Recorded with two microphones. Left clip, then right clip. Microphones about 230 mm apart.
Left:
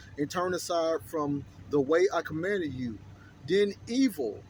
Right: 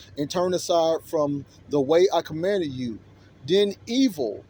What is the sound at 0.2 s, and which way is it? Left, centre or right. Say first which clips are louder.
Speech: right 6 dB; centre.